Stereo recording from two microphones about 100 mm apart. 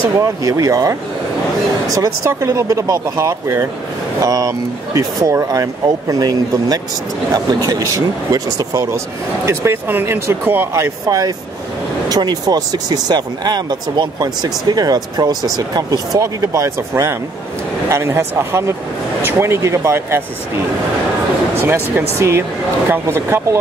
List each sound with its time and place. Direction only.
0.1 s speech: 35° right (ahead or behind)
9.5 s speech: 25° right (ahead or behind)
21.5 s speech: 20° right (ahead or behind)